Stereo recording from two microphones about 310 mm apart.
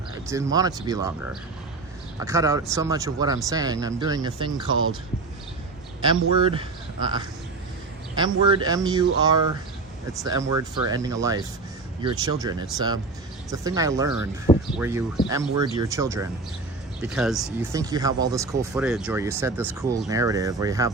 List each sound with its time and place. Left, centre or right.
0.3 s speech: centre
2.2 s speech: centre
4.7 s speech: right
6.0 s speech: centre
8.1 s speech: centre